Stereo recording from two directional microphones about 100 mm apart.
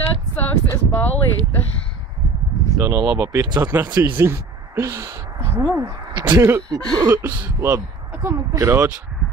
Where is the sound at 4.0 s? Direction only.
25° right (ahead or behind).